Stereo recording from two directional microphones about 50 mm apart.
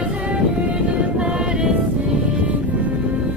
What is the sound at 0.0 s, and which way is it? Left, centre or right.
Music, right.